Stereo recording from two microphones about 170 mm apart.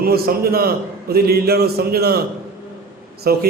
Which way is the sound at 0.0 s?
65° right (ahead or behind).